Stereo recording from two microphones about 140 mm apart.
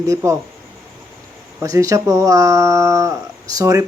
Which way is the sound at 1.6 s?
25° right (ahead or behind).